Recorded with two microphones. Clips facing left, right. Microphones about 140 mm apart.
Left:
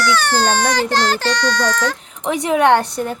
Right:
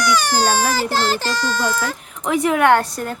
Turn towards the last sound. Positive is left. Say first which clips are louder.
# left 1 dB
turn(degrees=20)  # may be behind; listen again after turning